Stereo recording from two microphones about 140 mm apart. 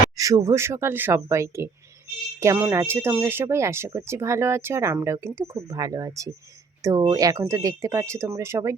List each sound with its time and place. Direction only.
0.2 s speech: 25° right (ahead or behind)